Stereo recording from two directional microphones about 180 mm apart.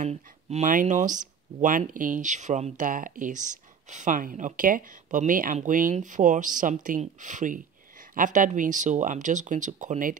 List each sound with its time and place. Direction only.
0.0 s speech: 40° right (ahead or behind)